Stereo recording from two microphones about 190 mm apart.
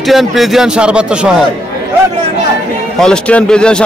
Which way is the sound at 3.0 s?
5° left (ahead or behind).